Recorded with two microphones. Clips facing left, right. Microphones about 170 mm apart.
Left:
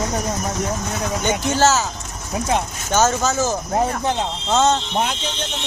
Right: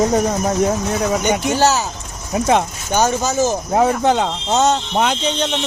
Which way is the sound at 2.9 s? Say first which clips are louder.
Right 1 dB; 15° right (ahead or behind).